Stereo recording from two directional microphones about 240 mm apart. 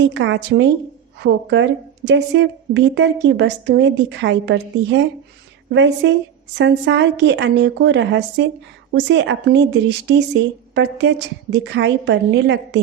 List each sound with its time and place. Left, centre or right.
0.0 s a woman's voice: right